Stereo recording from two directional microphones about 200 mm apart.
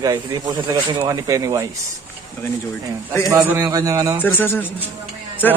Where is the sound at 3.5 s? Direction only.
15° right (ahead or behind).